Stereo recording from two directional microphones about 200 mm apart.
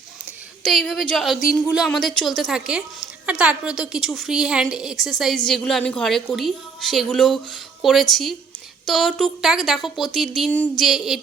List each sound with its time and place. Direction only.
0.6 s a woman's voice: centre (ahead or behind)